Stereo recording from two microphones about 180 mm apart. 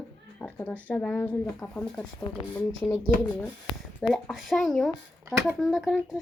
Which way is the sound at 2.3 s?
25° left (ahead or behind).